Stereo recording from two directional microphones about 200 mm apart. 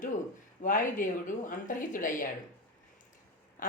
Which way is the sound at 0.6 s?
40° left (ahead or behind).